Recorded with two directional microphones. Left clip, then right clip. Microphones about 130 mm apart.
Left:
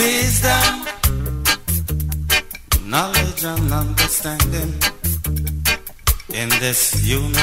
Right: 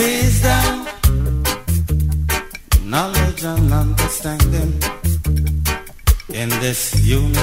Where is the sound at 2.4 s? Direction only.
5° left (ahead or behind).